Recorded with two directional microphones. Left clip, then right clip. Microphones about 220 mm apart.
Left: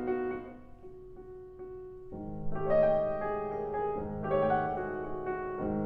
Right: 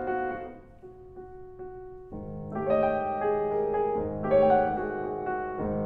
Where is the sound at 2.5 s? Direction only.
20° right (ahead or behind).